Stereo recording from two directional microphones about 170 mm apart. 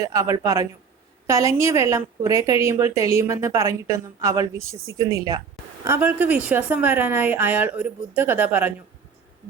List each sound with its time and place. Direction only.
0.1 s a woman's voice: 20° right (ahead or behind)